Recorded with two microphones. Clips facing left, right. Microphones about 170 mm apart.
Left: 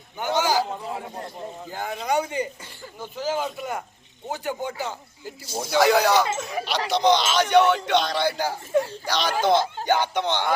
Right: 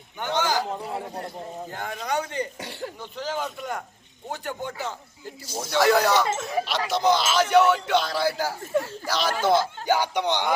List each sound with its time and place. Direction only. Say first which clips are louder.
0.2 s a sound: left 3 dB; 10° left (ahead or behind)
1.7 s speech: left 4 dB; 5° left (ahead or behind)
2.6 s speech: right 8 dB; 70° right (ahead or behind)
3.0 s speech: left 5 dB; 5° left (ahead or behind); by 10.5 s 15° right (ahead or behind)